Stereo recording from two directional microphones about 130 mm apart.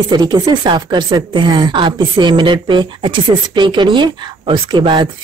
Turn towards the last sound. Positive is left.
turn(degrees=-35)  # may be behind; listen again after turning